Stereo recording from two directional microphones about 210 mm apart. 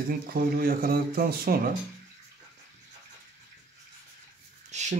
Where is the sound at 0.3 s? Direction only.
45° right (ahead or behind).